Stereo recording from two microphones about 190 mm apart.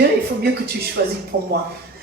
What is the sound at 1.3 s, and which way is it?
Speech, 45° right (ahead or behind).